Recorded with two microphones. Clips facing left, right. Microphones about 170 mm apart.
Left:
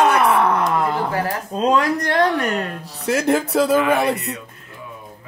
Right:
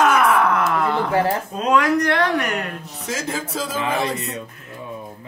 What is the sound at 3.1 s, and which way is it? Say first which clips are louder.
A woman's voice: left 9 dB; 65° left (ahead or behind).